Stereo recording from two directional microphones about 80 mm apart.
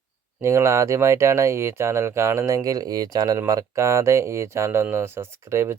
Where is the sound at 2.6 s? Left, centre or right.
Right.